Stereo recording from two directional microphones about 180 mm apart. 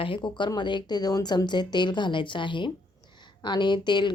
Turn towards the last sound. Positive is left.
turn(degrees=25)  # may be behind; listen again after turning